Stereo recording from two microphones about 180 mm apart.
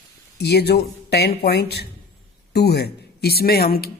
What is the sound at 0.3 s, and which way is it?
Speech, 65° left (ahead or behind).